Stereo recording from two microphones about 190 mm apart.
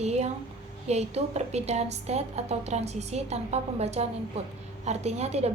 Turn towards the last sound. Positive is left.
turn(degrees=-35)  # may be behind; listen again after turning